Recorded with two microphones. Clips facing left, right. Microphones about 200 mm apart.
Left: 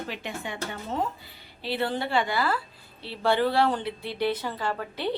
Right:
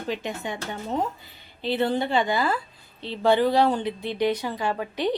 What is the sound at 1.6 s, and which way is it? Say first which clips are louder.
A woman's voice: right 5 dB; 20° right (ahead or behind).